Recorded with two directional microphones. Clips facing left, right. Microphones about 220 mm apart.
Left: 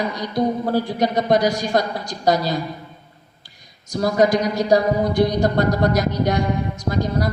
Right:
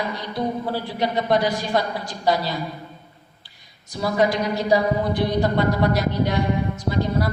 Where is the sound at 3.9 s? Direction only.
45° left (ahead or behind).